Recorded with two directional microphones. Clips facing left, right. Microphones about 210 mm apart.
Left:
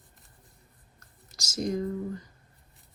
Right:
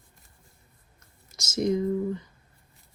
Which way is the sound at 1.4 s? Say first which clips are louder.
Right 5 dB; 25° right (ahead or behind).